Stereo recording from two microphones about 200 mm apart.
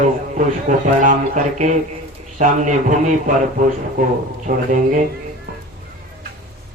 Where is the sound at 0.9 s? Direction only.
40° right (ahead or behind).